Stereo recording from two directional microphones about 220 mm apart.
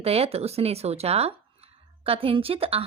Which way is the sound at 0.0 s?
25° right (ahead or behind).